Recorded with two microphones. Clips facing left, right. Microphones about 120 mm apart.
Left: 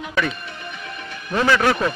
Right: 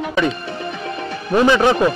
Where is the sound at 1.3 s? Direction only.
20° right (ahead or behind).